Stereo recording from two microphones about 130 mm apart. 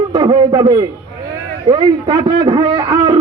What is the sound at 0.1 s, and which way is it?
A man's voice, 35° right (ahead or behind).